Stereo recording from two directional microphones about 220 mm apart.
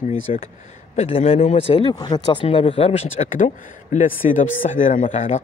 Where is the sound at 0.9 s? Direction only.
25° left (ahead or behind).